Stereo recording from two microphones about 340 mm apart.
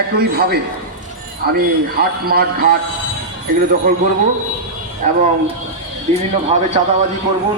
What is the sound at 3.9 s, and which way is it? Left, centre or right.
Speech, right.